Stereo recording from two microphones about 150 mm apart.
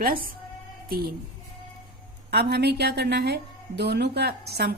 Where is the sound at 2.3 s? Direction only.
90° right.